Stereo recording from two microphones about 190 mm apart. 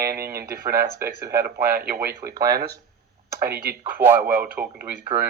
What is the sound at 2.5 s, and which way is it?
Speech, 55° right (ahead or behind).